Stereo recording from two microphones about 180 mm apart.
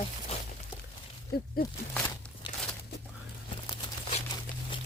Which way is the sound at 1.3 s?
60° left (ahead or behind).